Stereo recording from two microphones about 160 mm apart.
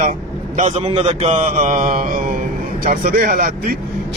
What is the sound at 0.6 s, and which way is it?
A man's voice, 45° right (ahead or behind).